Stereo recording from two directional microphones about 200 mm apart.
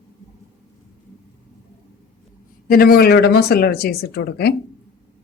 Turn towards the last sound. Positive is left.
turn(degrees=55)  # may be behind; listen again after turning